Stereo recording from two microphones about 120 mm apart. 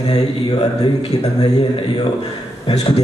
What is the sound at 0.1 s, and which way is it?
A man's voice, 35° left (ahead or behind).